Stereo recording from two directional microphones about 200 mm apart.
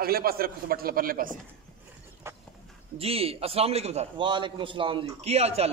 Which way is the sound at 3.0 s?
30° right (ahead or behind).